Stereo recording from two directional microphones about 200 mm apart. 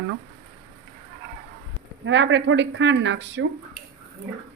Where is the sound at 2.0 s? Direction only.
65° right (ahead or behind).